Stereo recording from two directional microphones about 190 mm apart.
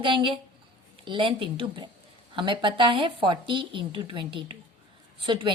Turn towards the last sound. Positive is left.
turn(degrees=-25)  # may be behind; listen again after turning